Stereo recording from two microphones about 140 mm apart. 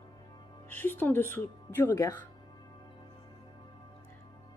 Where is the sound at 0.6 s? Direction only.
15° left (ahead or behind).